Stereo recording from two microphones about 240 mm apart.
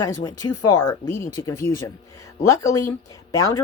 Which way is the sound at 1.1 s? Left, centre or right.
Centre.